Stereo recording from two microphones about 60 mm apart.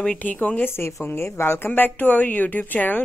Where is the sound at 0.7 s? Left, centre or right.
Left.